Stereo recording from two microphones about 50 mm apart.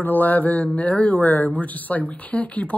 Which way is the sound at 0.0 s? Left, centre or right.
Left.